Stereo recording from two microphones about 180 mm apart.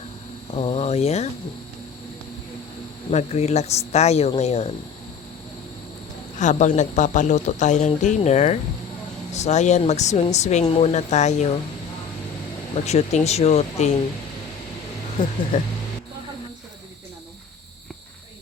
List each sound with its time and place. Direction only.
0.5 s speech: 35° left (ahead or behind)
3.1 s speech: 40° left (ahead or behind)
6.4 s speech: 40° left (ahead or behind)
12.8 s speech: 40° left (ahead or behind)
15.2 s speech: 25° left (ahead or behind)
15.5 s speech: 40° left (ahead or behind)